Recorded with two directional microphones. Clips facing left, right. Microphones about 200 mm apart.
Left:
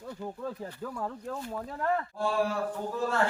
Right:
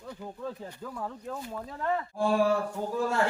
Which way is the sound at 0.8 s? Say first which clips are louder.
Left 2 dB; centre (ahead or behind).